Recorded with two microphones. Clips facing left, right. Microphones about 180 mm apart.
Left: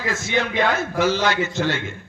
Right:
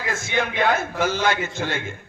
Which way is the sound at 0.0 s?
50° right (ahead or behind).